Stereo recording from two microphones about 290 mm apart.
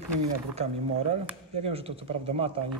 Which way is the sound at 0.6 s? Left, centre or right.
Right.